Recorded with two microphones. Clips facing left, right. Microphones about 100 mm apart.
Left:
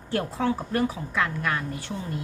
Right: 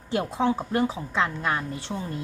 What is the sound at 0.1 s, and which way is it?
A woman's voice, 20° right (ahead or behind).